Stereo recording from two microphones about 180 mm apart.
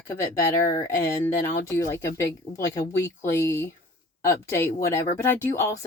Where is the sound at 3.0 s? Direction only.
15° left (ahead or behind).